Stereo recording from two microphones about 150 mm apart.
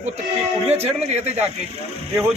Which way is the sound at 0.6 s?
45° right (ahead or behind).